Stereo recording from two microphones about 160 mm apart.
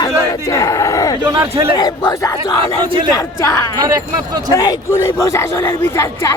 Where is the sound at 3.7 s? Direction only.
25° right (ahead or behind).